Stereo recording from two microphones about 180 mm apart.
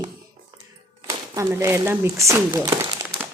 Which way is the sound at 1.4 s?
15° right (ahead or behind).